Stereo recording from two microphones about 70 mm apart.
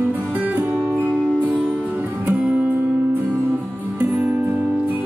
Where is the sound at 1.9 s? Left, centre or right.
Right.